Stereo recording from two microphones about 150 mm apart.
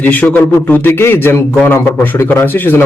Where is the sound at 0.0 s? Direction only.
10° left (ahead or behind).